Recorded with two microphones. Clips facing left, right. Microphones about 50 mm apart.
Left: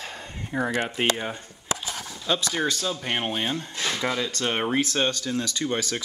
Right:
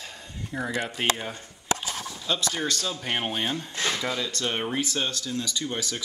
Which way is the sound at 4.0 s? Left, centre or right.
Left.